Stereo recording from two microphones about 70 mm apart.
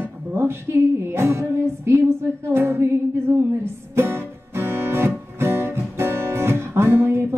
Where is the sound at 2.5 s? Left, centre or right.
Right.